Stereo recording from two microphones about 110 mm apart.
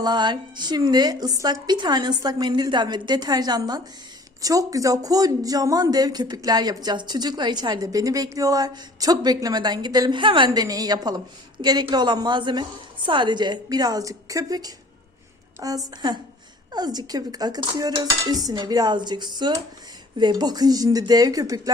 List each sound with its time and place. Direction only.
0.0 s speech: 45° right (ahead or behind)